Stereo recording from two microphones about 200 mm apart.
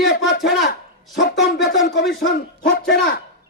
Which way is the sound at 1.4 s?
55° left (ahead or behind).